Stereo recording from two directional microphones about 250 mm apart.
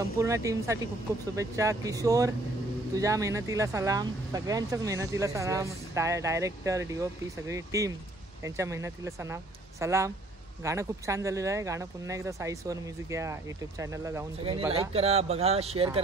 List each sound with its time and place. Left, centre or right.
0.2 s speech: centre
14.7 s speech: right